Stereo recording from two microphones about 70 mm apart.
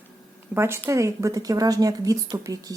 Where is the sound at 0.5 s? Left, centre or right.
Right.